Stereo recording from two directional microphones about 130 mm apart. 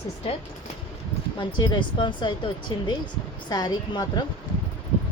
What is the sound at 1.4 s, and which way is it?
Speech, 35° left (ahead or behind).